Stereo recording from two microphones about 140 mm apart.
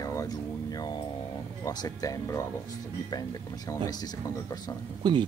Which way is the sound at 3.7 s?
20° left (ahead or behind).